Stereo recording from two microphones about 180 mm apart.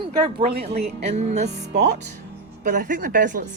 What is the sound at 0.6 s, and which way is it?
Speech, 35° right (ahead or behind).